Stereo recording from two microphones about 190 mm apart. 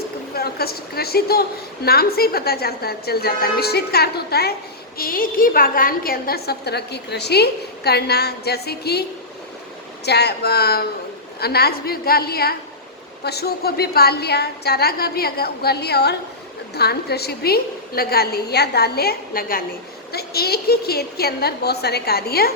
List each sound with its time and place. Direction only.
0.3 s a woman's voice: 55° left (ahead or behind)
10.1 s a woman's voice: 60° left (ahead or behind)